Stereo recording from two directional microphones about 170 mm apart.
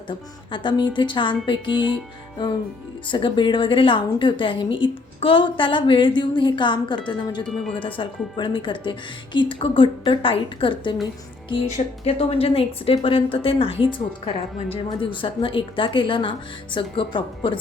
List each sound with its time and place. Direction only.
0.1 s a woman's voice: 30° left (ahead or behind)
3.1 s a woman's voice: 30° left (ahead or behind)
7.4 s speech: centre (ahead or behind)
7.8 s a woman's voice: 30° left (ahead or behind)
12.0 s a woman's voice: 35° left (ahead or behind)